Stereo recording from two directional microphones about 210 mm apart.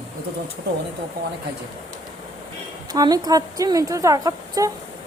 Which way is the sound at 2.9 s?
20° right (ahead or behind).